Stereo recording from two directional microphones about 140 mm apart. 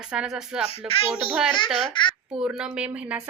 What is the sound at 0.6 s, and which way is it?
Speech, 45° left (ahead or behind).